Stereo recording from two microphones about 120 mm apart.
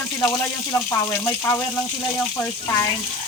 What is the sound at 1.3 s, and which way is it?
Speech, 25° left (ahead or behind).